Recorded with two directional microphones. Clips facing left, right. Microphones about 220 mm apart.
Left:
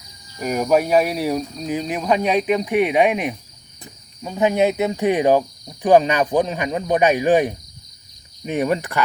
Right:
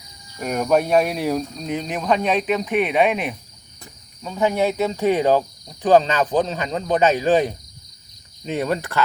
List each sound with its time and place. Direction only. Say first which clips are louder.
0.3 s speech: left 1 dB; 5° left (ahead or behind)
4.2 s cricket: left 2 dB; 15° left (ahead or behind)